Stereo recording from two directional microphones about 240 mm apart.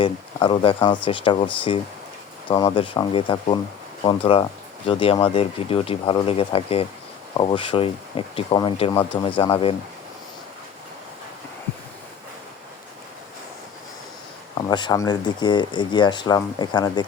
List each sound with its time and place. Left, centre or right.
0.0 s speech: left
2.5 s speech: centre
14.7 s speech: centre